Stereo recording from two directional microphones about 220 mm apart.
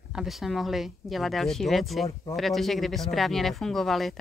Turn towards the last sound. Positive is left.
turn(degrees=0)  # may be behind; listen again after turning